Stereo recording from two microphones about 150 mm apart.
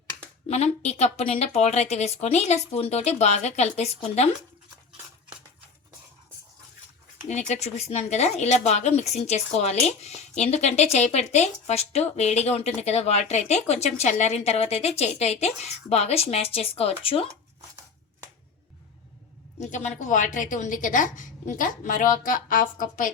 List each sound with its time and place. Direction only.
0.4 s speech: 45° left (ahead or behind)
7.3 s speech: 50° left (ahead or behind)
19.5 s a woman's voice: 50° left (ahead or behind)